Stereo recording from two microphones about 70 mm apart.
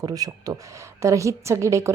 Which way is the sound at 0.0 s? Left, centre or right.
Right.